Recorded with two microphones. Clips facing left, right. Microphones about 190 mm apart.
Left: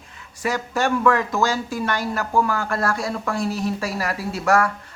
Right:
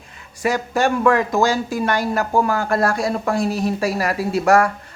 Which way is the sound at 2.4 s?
45° right (ahead or behind).